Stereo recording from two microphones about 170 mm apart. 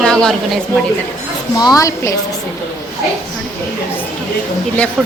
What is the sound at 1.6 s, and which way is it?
Speech, 20° left (ahead or behind).